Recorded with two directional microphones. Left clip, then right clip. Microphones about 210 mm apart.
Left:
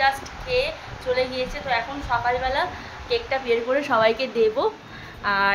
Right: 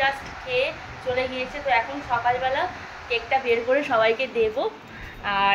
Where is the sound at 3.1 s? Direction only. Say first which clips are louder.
Even; 20° left (ahead or behind).